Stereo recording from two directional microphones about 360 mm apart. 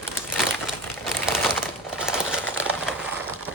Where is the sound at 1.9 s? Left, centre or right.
Centre.